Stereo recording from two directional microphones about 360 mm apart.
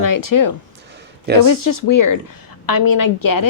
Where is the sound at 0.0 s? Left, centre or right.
Left.